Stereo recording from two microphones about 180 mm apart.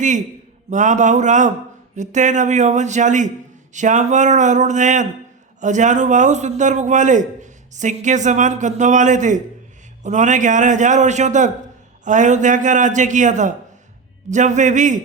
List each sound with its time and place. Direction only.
0.7 s a man's voice: 45° right (ahead or behind)